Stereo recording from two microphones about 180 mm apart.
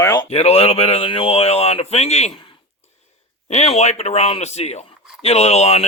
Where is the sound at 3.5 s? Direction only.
40° left (ahead or behind).